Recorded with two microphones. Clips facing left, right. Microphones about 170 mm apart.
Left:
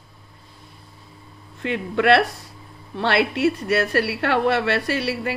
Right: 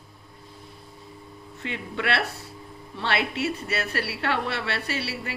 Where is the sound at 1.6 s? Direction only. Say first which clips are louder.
Left 9 dB; 55° left (ahead or behind).